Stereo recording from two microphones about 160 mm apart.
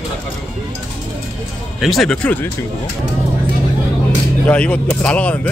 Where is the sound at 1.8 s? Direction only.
Centre (ahead or behind).